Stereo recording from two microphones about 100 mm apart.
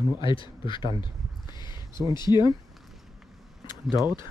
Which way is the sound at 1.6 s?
45° left (ahead or behind).